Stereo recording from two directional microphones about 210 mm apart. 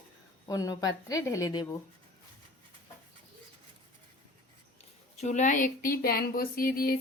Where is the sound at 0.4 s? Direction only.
15° left (ahead or behind).